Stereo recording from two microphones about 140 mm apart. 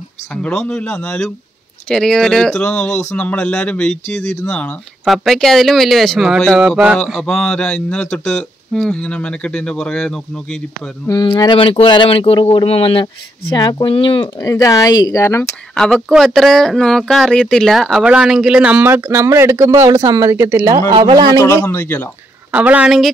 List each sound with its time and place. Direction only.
0.3 s speech: 5° left (ahead or behind)
11.1 s speech: 30° left (ahead or behind)
13.6 s speech: 30° left (ahead or behind)
14.4 s speech: 20° left (ahead or behind)
15.7 s speech: 5° left (ahead or behind); by 20.7 s 20° right (ahead or behind)
20.9 s speech: 30° right (ahead or behind)
21.6 s speech: 15° left (ahead or behind)
22.5 s a woman's voice: 10° right (ahead or behind)